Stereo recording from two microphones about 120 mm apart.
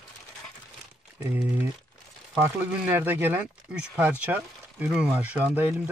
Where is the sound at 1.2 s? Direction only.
15° right (ahead or behind).